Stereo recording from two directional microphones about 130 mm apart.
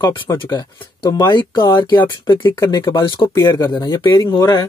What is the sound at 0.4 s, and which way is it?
Speech, 35° left (ahead or behind).